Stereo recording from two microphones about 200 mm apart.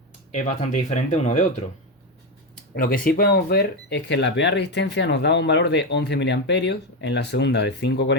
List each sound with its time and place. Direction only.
0.3 s speech: 35° left (ahead or behind)
2.7 s speech: 45° left (ahead or behind)